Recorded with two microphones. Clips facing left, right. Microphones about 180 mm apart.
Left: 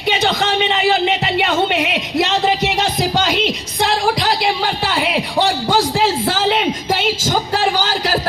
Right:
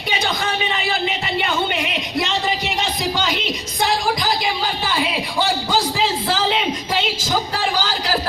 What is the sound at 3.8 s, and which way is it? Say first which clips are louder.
Music: left 3 dB; 70° left (ahead or behind).